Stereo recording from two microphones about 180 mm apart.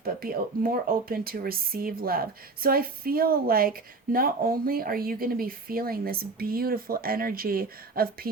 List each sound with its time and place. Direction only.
0.0 s speech: 55° right (ahead or behind)